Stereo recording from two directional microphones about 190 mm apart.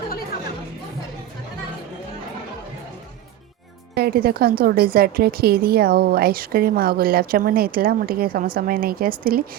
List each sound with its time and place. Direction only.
3.9 s a woman's voice: 55° right (ahead or behind)